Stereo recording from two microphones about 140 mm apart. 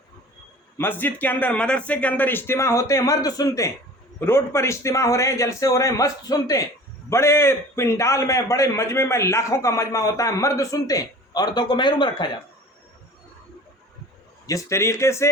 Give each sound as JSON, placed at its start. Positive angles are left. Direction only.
{"t": 0.8, "sound": "a man's voice", "side_deg": 15}
{"t": 14.4, "sound": "a man's voice", "side_deg": 20}